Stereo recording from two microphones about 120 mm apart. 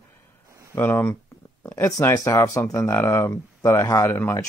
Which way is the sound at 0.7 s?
15° left (ahead or behind).